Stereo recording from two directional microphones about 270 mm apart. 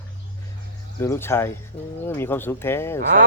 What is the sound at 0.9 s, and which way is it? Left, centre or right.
Speech, centre.